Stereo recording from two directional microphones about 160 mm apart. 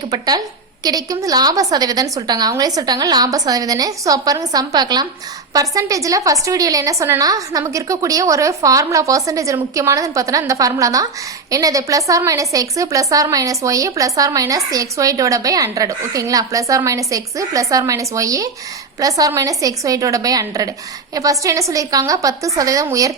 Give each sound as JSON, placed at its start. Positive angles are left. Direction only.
{"t": 0.1, "sound": "a woman's voice", "side_deg": -25}